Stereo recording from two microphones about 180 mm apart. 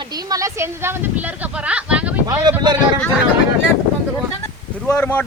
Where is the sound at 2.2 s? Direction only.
20° right (ahead or behind).